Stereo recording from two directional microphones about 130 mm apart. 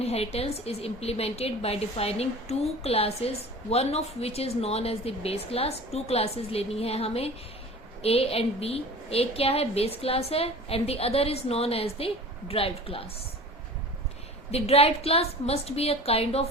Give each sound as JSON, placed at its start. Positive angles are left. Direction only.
{"t": 0.0, "sound": "a woman's voice", "side_deg": 50}
{"t": 14.5, "sound": "a woman's voice", "side_deg": 50}